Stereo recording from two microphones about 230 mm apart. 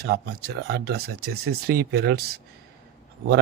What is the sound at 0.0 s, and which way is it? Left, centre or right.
Speech, right.